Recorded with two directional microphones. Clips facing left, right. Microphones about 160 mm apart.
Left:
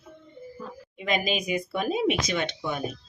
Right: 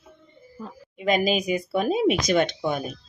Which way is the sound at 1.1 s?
40° right (ahead or behind).